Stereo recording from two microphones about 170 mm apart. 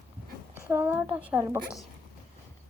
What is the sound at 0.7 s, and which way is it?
Speech, 15° right (ahead or behind).